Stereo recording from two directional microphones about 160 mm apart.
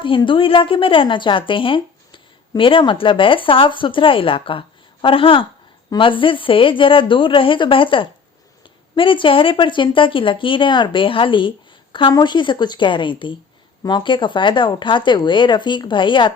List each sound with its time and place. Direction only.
0.0 s a woman's voice: 30° left (ahead or behind)